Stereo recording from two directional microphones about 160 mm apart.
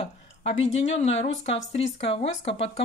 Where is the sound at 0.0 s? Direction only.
40° left (ahead or behind).